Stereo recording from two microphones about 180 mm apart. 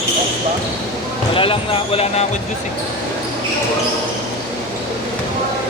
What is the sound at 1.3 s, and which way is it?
Speech, 30° left (ahead or behind).